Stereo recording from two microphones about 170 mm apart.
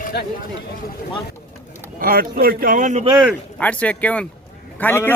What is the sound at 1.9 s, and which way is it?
Speech, 60° right (ahead or behind).